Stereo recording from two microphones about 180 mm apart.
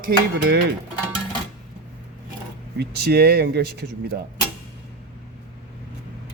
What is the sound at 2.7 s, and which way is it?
Speech, 65° right (ahead or behind).